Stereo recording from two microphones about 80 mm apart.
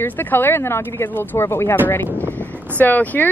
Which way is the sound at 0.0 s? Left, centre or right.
Left.